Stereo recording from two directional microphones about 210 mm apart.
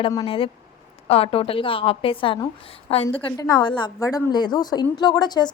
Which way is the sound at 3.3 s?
15° left (ahead or behind).